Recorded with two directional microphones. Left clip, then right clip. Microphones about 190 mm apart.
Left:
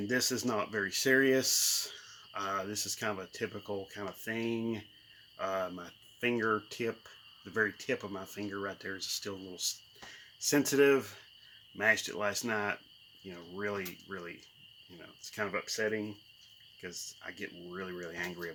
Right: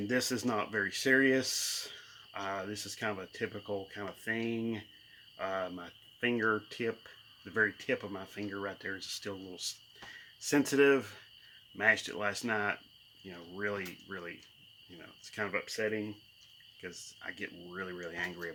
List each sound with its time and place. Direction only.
0.1 s speech: centre (ahead or behind)